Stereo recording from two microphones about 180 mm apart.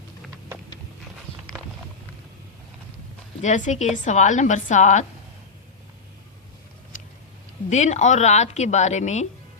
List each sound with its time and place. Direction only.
1.3 s walk: 30° left (ahead or behind)
3.4 s a woman's voice: 40° left (ahead or behind)
7.7 s a woman's voice: 40° left (ahead or behind)